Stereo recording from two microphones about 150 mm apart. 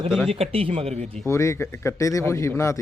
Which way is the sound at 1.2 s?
20° left (ahead or behind).